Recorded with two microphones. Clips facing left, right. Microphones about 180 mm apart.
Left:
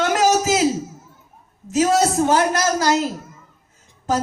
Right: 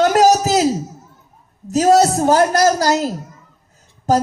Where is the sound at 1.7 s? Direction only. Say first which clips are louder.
Right 5 dB; 40° right (ahead or behind).